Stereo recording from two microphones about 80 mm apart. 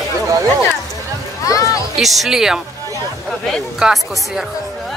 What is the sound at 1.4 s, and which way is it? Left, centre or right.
Music, left.